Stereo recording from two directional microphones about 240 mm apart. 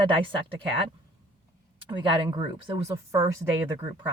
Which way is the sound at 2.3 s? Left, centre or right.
Right.